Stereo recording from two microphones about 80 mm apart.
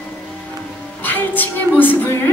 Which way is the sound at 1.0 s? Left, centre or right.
Left.